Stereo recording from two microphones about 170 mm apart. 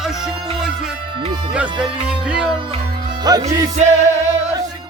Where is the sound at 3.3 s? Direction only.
25° right (ahead or behind).